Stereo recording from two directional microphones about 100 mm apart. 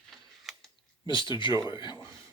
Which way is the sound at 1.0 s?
50° left (ahead or behind).